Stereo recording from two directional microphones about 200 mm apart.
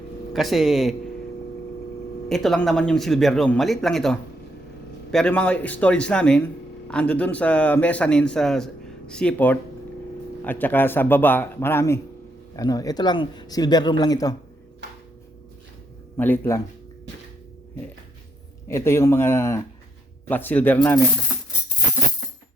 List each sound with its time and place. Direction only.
0.3 s speech: centre (ahead or behind)
2.3 s speech: centre (ahead or behind); by 14.3 s 20° left (ahead or behind)
16.1 s speech: 10° left (ahead or behind)
18.7 s speech: 15° left (ahead or behind)